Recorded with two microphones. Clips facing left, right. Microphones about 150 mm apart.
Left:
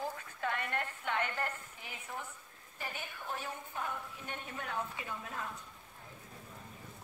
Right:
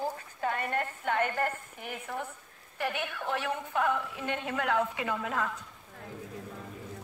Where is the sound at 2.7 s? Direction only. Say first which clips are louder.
Right 11 dB; 70° right (ahead or behind); by 6.1 s 90° right.